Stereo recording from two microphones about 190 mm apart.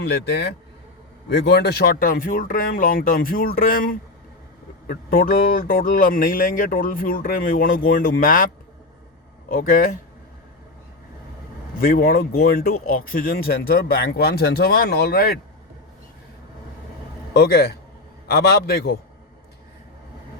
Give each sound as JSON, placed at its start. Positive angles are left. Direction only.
{"t": 0.1, "sound": "a man's voice", "side_deg": 60}
{"t": 9.5, "sound": "speech", "side_deg": 50}
{"t": 11.8, "sound": "speech", "side_deg": 50}
{"t": 17.3, "sound": "a man's voice", "side_deg": 55}